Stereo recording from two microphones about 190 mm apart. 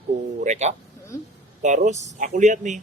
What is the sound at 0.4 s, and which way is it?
Speech, 35° right (ahead or behind).